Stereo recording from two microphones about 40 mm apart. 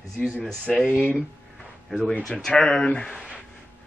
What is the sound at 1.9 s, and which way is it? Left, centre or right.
A man's voice, centre.